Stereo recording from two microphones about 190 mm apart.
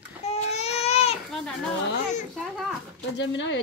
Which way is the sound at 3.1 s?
70° left (ahead or behind).